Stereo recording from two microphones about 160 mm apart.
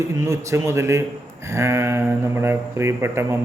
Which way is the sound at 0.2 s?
15° right (ahead or behind).